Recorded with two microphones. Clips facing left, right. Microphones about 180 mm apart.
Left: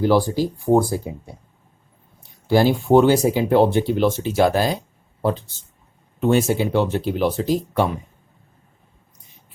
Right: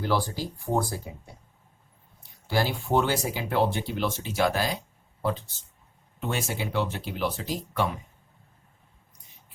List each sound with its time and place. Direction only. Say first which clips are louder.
0.0 s speech: left 10 dB; 15° left (ahead or behind)
2.5 s speech: left 11 dB; 20° left (ahead or behind)
6.1 s speech: left 13 dB; 30° left (ahead or behind)